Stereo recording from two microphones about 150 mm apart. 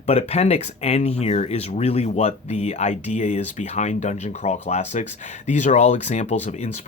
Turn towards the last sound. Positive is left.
turn(degrees=50)  # may be behind; listen again after turning